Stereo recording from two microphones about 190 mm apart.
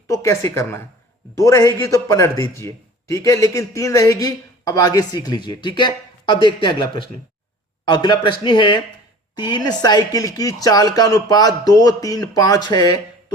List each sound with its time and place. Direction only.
0.1 s a man's voice: 15° left (ahead or behind)